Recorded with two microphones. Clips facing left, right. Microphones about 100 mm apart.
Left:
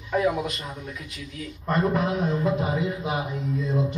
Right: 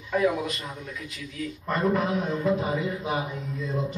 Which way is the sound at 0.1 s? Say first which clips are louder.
Left 1 dB; 15° left (ahead or behind).